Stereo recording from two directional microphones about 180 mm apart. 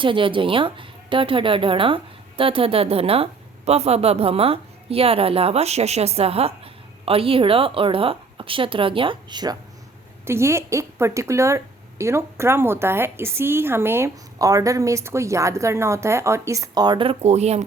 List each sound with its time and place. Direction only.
0.0 s a woman's voice: 30° right (ahead or behind)